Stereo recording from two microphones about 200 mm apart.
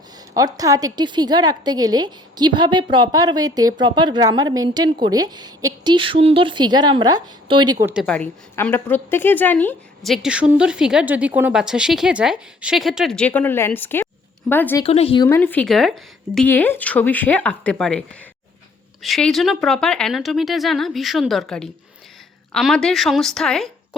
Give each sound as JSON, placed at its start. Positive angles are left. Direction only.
{"t": 0.3, "sound": "a woman's voice", "side_deg": -20}
{"t": 7.9, "sound": "a woman's voice", "side_deg": 5}
{"t": 14.8, "sound": "a woman's voice", "side_deg": 30}
{"t": 15.3, "sound": "a woman's voice", "side_deg": 10}
{"t": 19.0, "sound": "a woman's voice", "side_deg": 0}